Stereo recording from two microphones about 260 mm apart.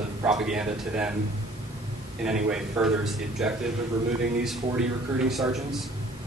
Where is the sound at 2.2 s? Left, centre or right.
Centre.